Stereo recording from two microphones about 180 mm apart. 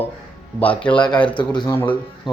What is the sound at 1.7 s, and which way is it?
Speech, 10° left (ahead or behind).